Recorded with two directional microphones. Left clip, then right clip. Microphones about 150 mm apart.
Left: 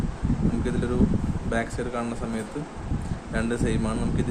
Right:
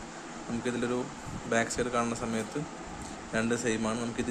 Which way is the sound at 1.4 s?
20° right (ahead or behind).